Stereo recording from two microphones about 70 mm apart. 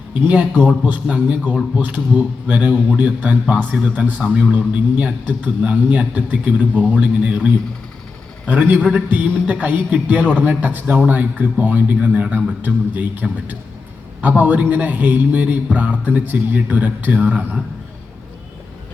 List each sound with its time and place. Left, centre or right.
0.1 s a man's voice: right